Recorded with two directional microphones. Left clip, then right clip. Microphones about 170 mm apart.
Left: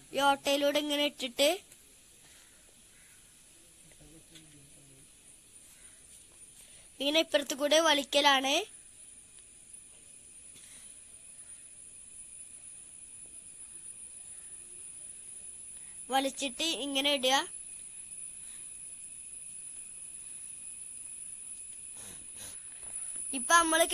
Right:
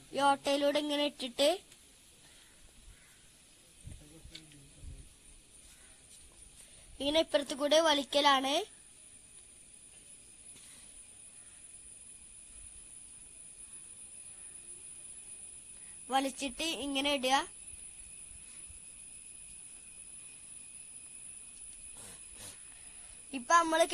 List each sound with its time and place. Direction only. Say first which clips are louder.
0.1 s a woman's voice: left 2 dB; centre (ahead or behind)
7.0 s a woman's voice: left 2 dB; centre (ahead or behind)
16.1 s a woman's voice: left 2 dB; centre (ahead or behind)
21.9 s a sound: left 2 dB; centre (ahead or behind)
23.3 s a woman's voice: left 2 dB; centre (ahead or behind)